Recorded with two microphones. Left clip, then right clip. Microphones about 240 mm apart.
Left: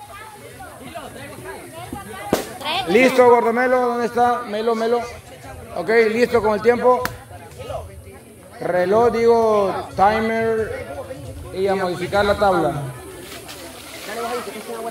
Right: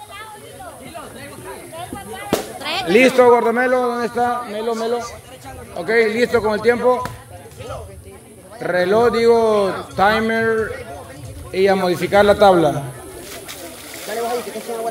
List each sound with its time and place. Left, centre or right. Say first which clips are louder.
2.6 s a sound: even; right
3.2 s a man's voice: right 1 dB; centre
8.6 s a man's voice: right 1 dB; centre
11.5 s a man's voice: right 5 dB; right